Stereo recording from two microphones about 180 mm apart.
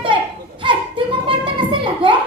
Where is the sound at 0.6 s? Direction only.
30° right (ahead or behind).